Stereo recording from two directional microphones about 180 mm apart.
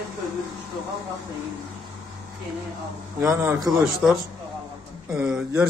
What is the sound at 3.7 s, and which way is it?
Speech, centre (ahead or behind).